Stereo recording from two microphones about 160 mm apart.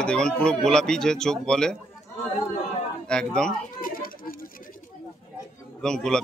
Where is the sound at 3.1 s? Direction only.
5° left (ahead or behind).